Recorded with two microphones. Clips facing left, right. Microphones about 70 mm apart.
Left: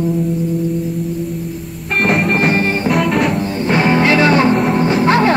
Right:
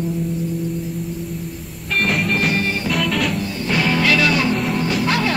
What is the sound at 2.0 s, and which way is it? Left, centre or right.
Music, left.